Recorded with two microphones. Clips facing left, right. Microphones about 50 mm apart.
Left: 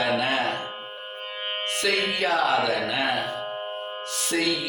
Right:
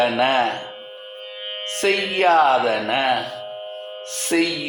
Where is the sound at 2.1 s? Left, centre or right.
Right.